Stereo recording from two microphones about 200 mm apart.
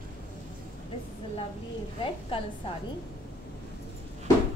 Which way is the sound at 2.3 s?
25° left (ahead or behind).